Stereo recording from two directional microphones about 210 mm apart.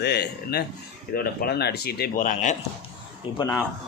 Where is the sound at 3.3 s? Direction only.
25° left (ahead or behind).